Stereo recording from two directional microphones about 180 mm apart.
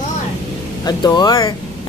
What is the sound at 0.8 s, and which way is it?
Speech, 25° left (ahead or behind).